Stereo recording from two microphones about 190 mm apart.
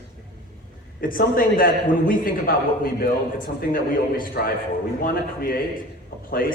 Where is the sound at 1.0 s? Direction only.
45° left (ahead or behind).